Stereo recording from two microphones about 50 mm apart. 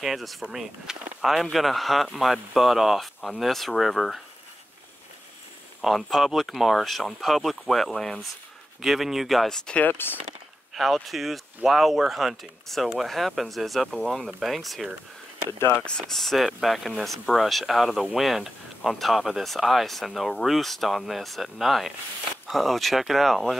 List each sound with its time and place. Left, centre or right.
0.0 s speech: centre
5.8 s speech: centre
8.8 s speech: centre
9.8 s speech: left
10.7 s a sound: centre
11.1 s speech: centre
16.1 s speech: centre